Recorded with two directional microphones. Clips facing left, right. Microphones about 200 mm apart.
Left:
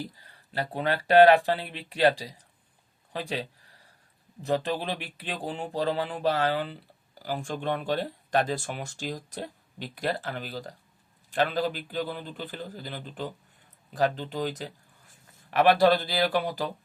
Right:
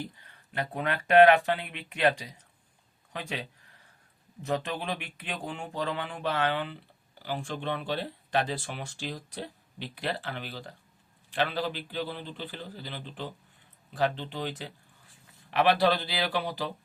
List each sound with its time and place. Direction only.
0.0 s a man's voice: 35° left (ahead or behind)